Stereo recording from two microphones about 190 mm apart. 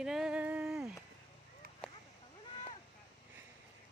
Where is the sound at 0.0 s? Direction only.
Centre (ahead or behind).